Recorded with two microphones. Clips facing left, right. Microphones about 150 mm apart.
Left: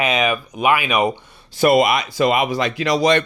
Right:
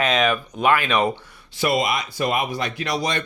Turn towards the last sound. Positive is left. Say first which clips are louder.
# left 8 dB
turn(degrees=90)